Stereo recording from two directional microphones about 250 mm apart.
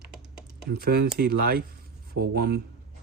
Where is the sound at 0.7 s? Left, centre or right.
Right.